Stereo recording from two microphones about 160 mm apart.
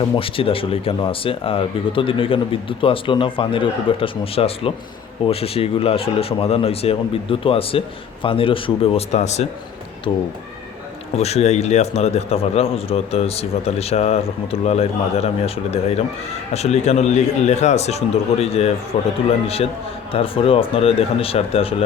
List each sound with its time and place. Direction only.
0.0 s a man's voice: 35° left (ahead or behind)
10.1 s a man's voice: 30° left (ahead or behind)
11.2 s a man's voice: 40° left (ahead or behind)